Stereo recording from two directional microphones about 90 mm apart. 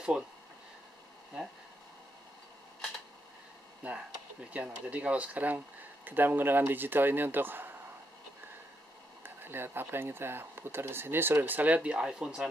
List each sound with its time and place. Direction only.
3.8 s speech: 15° right (ahead or behind)
9.2 s speech: 25° right (ahead or behind); by 12.4 s 10° right (ahead or behind)